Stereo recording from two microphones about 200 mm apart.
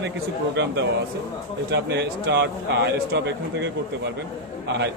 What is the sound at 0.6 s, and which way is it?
A man's voice, 65° right (ahead or behind).